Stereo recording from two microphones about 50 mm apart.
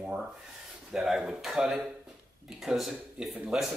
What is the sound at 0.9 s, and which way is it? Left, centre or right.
Speech, centre.